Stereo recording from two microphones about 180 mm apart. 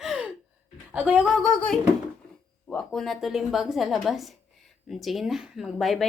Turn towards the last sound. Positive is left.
turn(degrees=0)  # may be behind; listen again after turning